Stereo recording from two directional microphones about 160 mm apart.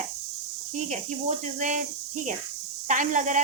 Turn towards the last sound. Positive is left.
turn(degrees=-55)  # may be behind; listen again after turning